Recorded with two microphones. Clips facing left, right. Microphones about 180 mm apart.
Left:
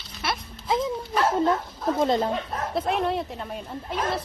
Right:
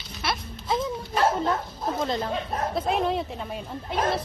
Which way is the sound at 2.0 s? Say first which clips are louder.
Left 6 dB; 25° left (ahead or behind).